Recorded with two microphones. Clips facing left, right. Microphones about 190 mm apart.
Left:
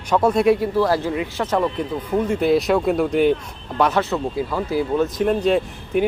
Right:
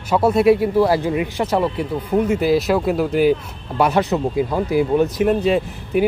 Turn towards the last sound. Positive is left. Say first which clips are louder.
# right 1 dB
turn(degrees=-5)  # may be behind; listen again after turning